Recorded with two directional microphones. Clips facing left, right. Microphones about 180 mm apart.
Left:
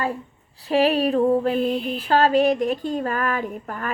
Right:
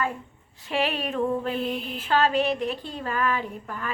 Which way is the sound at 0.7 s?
40° left (ahead or behind).